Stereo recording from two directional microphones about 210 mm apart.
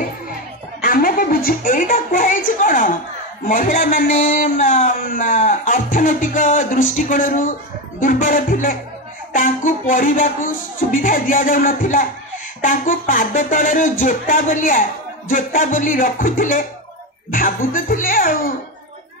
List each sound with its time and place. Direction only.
0.7 s a woman's voice: 40° left (ahead or behind)